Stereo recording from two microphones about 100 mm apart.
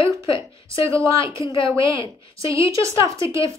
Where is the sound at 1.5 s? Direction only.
60° left (ahead or behind).